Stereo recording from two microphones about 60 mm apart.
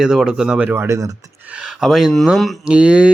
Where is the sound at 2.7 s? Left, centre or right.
Centre.